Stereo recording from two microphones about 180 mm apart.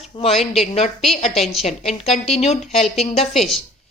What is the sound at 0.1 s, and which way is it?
Speech, 35° left (ahead or behind).